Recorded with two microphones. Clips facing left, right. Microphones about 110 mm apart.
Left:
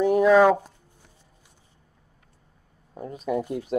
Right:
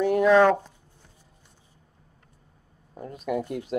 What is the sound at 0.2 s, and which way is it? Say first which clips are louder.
Speech: left 1 dB; 5° left (ahead or behind).